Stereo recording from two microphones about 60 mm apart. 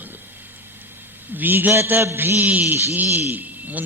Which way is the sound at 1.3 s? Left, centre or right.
Right.